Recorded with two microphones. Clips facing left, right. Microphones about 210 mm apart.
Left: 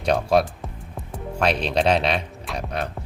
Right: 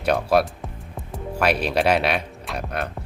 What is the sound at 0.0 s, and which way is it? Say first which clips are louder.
Speech: even; 5° right (ahead or behind).